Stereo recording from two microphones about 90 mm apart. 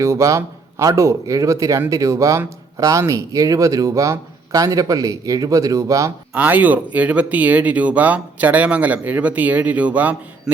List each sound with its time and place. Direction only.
0.0 s speech: 35° right (ahead or behind)
6.3 s speech: 20° right (ahead or behind)